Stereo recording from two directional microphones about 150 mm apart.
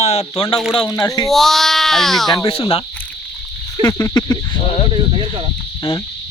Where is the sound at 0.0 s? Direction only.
45° left (ahead or behind).